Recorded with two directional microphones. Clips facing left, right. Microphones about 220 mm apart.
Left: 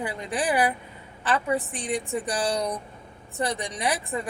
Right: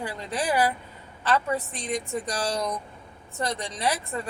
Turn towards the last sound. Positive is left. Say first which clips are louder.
# left 1 dB
turn(degrees=15)  # may be behind; listen again after turning